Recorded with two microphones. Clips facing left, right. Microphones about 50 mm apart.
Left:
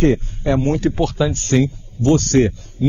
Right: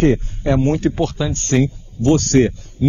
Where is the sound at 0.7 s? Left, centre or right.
Right.